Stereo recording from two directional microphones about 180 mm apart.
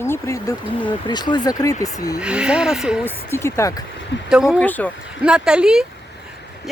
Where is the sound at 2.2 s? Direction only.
5° right (ahead or behind).